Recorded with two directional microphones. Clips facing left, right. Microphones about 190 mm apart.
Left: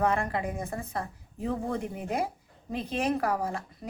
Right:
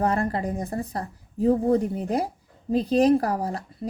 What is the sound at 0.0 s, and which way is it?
A woman's voice, 35° right (ahead or behind).